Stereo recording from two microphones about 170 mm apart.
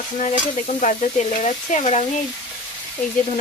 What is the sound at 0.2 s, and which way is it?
Stir, 45° left (ahead or behind).